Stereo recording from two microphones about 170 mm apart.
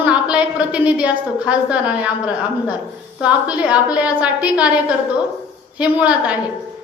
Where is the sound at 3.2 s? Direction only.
5° right (ahead or behind).